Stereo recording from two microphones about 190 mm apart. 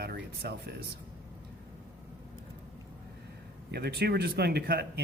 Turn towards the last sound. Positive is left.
turn(degrees=-55)  # may be behind; listen again after turning